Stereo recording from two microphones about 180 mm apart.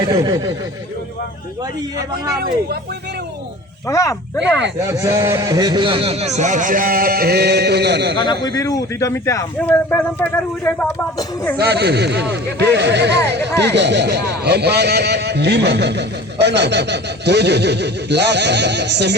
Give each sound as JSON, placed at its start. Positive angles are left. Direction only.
{"t": 0.0, "sound": "speech", "side_deg": -15}
{"t": 3.8, "sound": "speech", "side_deg": 15}
{"t": 4.9, "sound": "speech", "side_deg": -15}
{"t": 8.1, "sound": "speech", "side_deg": 25}
{"t": 11.5, "sound": "speech", "side_deg": -65}